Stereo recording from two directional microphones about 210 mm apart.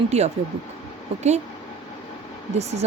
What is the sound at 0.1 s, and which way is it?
Speech, 30° right (ahead or behind).